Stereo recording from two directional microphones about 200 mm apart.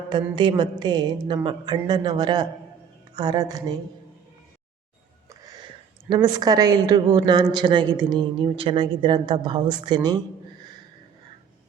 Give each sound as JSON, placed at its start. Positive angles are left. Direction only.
{"t": 0.1, "sound": "a woman's voice", "side_deg": -25}
{"t": 5.3, "sound": "a sound", "side_deg": -20}
{"t": 6.1, "sound": "a woman's voice", "side_deg": -20}